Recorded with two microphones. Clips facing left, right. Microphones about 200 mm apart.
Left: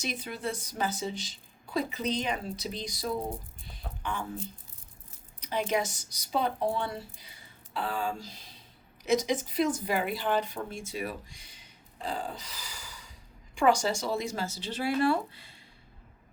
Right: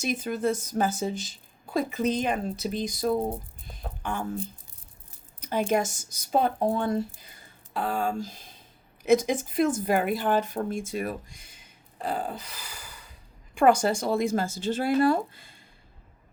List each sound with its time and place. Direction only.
0.0 s speech: 45° right (ahead or behind)
3.7 s a sound: 45° right (ahead or behind)
5.4 s speech: 45° right (ahead or behind)